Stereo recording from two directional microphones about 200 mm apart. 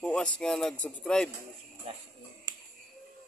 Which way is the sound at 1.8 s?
30° right (ahead or behind).